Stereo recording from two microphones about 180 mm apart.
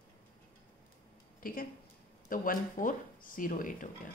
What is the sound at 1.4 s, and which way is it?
A woman's voice, 50° left (ahead or behind).